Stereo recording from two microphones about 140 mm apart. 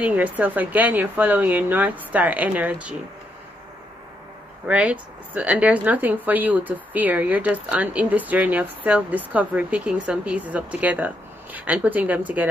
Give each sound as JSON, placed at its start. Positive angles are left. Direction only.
{"t": 0.0, "sound": "speech", "side_deg": -10}
{"t": 4.6, "sound": "speech", "side_deg": -10}